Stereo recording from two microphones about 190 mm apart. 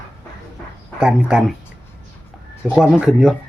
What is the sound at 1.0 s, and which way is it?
Speech, 5° right (ahead or behind).